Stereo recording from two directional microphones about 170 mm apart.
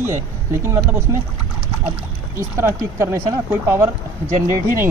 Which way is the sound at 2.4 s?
15° right (ahead or behind).